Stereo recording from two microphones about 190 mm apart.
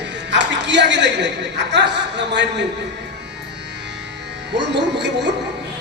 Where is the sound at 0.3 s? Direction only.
65° right (ahead or behind).